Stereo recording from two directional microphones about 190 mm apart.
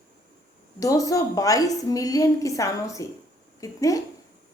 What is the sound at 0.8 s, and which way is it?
A woman's voice, 15° left (ahead or behind).